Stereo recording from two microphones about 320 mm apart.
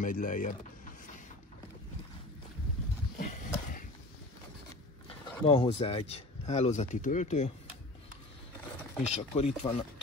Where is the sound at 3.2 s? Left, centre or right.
Left.